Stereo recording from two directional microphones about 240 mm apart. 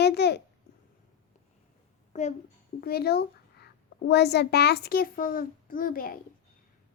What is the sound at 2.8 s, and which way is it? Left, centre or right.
A child's voice, left.